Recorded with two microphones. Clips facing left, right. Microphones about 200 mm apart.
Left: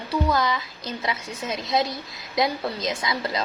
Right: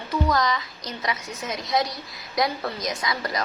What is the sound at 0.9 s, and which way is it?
A woman's voice, 30° left (ahead or behind).